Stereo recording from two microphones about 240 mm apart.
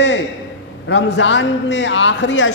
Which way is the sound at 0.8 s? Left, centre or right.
Left.